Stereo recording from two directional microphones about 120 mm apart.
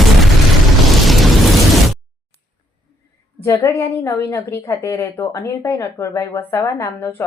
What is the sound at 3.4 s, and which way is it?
Speech, 25° left (ahead or behind).